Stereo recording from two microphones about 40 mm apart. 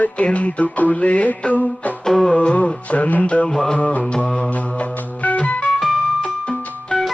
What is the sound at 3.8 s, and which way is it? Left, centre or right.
Music, left.